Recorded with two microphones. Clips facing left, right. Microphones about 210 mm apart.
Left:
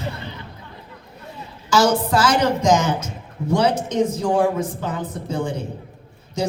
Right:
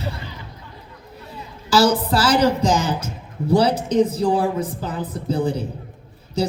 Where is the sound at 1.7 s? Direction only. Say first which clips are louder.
Even; 35° right (ahead or behind).